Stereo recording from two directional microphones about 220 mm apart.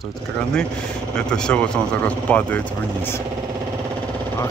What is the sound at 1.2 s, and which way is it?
Speech, 5° left (ahead or behind).